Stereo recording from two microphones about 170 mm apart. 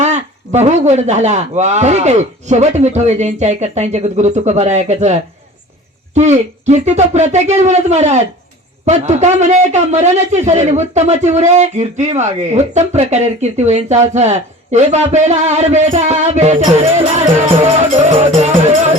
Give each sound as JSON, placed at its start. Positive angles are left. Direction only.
{"t": 0.0, "sound": "a man's voice", "side_deg": -40}
{"t": 6.1, "sound": "a man's voice", "side_deg": -45}